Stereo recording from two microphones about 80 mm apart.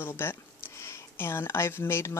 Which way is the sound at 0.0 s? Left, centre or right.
Left.